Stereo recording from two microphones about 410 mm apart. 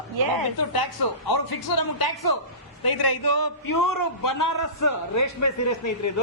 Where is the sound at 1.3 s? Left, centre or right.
Left.